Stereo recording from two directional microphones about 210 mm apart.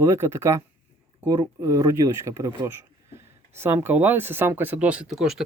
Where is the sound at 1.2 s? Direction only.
15° right (ahead or behind).